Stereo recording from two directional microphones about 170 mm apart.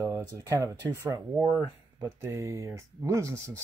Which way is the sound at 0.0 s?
20° right (ahead or behind).